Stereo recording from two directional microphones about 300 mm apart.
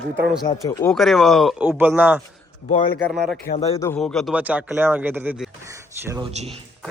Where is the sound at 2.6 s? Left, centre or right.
Left.